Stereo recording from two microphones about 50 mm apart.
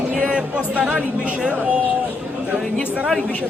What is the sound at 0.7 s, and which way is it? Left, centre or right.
A woman's voice, right.